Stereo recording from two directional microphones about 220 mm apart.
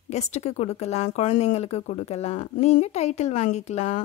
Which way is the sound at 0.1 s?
30° left (ahead or behind).